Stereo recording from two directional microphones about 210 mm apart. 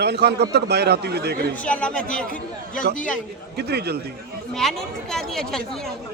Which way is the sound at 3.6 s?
50° right (ahead or behind).